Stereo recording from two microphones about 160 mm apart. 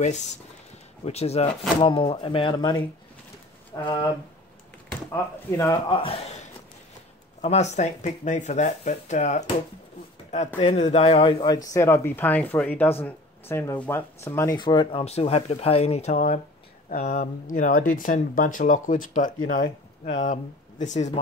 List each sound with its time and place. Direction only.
0.0 s speech: 45° left (ahead or behind); by 4.1 s 20° left (ahead or behind)
5.1 s speech: 20° left (ahead or behind)
5.9 s speech: 35° left (ahead or behind)
7.4 s speech: 45° left (ahead or behind)
11.4 s speech: 20° left (ahead or behind); by 21.2 s 45° left (ahead or behind)